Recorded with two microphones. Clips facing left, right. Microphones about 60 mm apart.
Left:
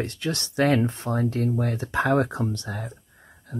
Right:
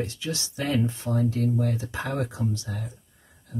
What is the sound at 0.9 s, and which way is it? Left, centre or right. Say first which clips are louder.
Speech: left 1 dB; left.